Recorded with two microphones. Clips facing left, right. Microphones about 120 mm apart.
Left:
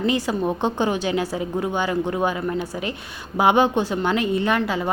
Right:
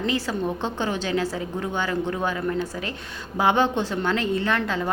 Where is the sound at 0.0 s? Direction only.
15° left (ahead or behind).